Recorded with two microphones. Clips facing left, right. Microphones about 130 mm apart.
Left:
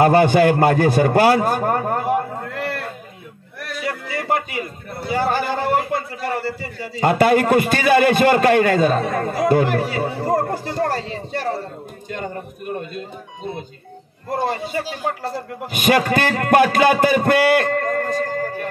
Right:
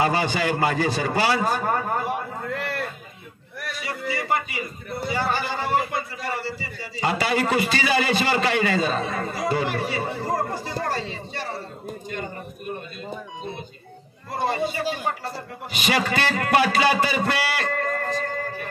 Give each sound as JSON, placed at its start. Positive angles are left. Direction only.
{"t": 0.0, "sound": "a man's voice", "side_deg": 55}
{"t": 3.8, "sound": "music", "side_deg": 50}
{"t": 5.1, "sound": "a man's voice", "side_deg": 50}
{"t": 14.3, "sound": "a man's voice", "side_deg": 45}